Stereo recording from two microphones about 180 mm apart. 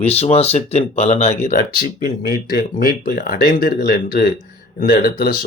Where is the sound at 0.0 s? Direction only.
35° left (ahead or behind).